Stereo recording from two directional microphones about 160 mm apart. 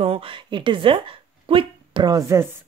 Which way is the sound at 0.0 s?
35° right (ahead or behind).